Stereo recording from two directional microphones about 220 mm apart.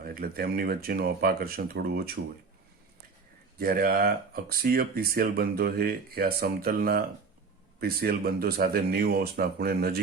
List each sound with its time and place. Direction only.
0.0 s speech: 45° right (ahead or behind)
3.6 s speech: 45° right (ahead or behind)